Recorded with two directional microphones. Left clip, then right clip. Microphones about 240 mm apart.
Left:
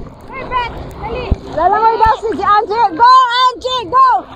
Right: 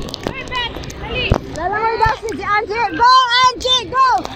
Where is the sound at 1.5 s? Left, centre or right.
Right.